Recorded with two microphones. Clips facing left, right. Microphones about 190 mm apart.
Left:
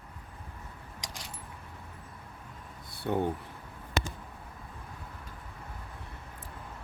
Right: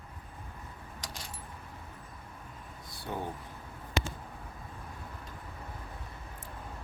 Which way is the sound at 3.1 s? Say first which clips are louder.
Left 8 dB; 60° left (ahead or behind).